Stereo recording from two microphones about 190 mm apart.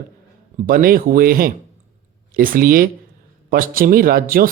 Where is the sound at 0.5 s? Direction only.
50° right (ahead or behind).